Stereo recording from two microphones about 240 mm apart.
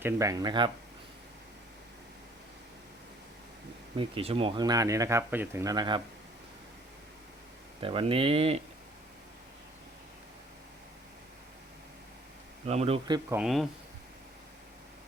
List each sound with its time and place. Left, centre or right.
0.0 s speech: centre
3.9 s speech: right
7.8 s speech: right
12.6 s speech: right
13.4 s speech: centre